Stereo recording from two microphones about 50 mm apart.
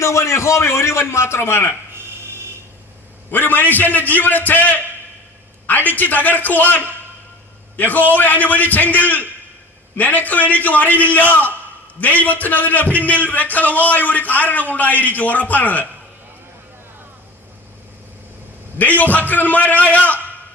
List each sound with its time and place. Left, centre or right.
0.0 s a man's voice: left
3.3 s a man's voice: left
18.8 s a man's voice: left